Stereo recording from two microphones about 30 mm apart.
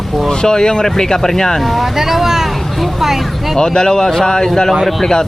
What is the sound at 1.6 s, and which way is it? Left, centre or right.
Speech, centre.